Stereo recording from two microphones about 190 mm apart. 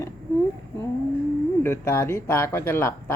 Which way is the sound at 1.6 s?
15° left (ahead or behind).